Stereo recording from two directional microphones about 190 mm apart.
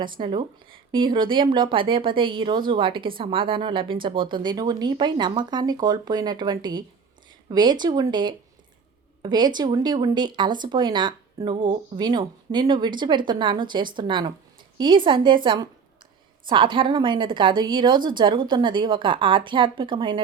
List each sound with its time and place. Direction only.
0.0 s speech: 25° right (ahead or behind)
16.5 s speech: 25° right (ahead or behind)